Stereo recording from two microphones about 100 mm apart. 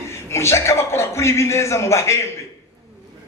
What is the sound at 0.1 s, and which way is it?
A man's voice, 25° left (ahead or behind).